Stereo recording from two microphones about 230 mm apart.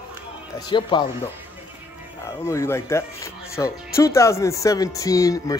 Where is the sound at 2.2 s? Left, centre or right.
Centre.